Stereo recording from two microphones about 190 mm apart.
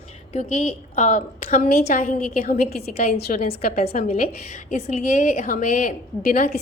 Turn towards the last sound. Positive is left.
turn(degrees=40)  # may be behind; listen again after turning